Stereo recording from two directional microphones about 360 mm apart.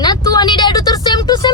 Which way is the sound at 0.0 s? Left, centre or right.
Centre.